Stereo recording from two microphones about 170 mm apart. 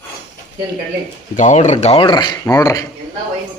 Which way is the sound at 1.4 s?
45° left (ahead or behind).